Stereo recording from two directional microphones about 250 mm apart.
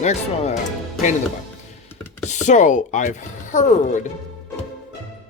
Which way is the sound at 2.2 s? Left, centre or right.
Left.